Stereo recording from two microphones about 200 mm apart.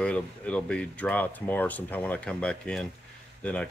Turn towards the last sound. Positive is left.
turn(degrees=5)  # may be behind; listen again after turning